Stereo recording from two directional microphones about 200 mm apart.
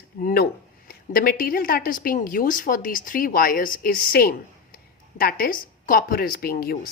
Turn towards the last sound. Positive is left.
turn(degrees=50)  # may be behind; listen again after turning